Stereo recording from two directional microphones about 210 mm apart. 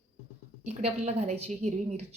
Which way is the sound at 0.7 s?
30° right (ahead or behind).